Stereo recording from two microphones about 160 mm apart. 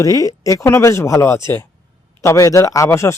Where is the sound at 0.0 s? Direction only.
20° left (ahead or behind).